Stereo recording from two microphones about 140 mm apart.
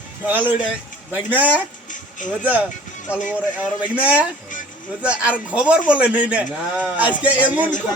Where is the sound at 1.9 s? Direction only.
65° left (ahead or behind).